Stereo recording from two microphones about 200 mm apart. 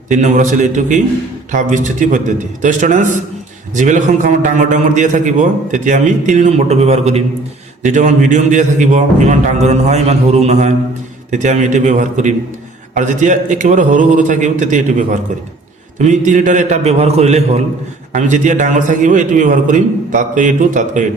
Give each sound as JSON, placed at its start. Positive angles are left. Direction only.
{"t": 0.1, "sound": "a man's voice", "side_deg": -40}